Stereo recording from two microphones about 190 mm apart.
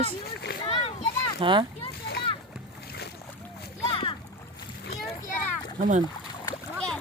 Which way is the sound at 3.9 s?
25° left (ahead or behind).